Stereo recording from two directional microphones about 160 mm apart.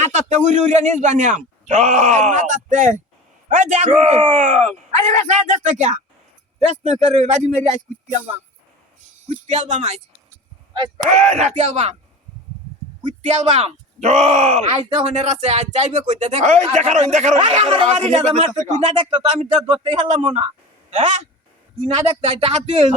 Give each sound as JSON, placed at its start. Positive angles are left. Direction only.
{"t": 0.0, "sound": "speech", "side_deg": -45}
{"t": 9.3, "sound": "speech", "side_deg": -45}
{"t": 11.3, "sound": "speech", "side_deg": -45}
{"t": 13.1, "sound": "speech", "side_deg": -45}